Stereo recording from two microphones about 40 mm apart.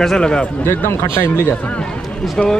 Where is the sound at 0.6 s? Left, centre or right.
Left.